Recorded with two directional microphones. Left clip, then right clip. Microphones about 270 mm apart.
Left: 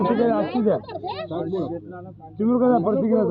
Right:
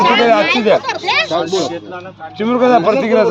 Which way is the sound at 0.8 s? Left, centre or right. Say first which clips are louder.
Right 15 dB; right.